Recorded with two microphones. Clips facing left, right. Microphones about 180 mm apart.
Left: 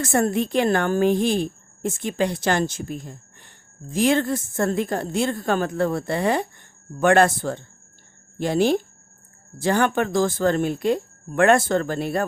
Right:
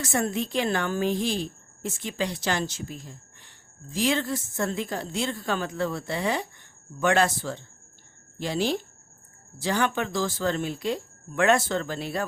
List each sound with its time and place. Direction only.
0.0 s a woman's voice: 50° left (ahead or behind)